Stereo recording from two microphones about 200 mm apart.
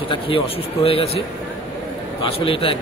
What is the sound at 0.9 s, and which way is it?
Speech, 30° left (ahead or behind).